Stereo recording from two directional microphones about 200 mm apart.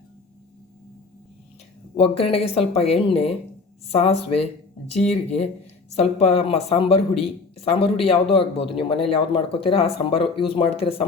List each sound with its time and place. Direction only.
2.0 s speech: 30° left (ahead or behind)